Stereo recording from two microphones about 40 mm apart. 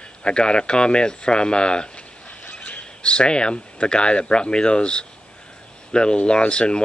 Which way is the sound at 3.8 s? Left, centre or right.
Left.